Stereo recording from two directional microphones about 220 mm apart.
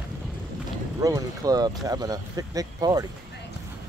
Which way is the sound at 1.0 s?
15° right (ahead or behind).